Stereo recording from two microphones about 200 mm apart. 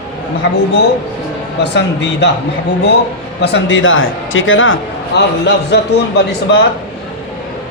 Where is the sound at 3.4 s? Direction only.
65° left (ahead or behind).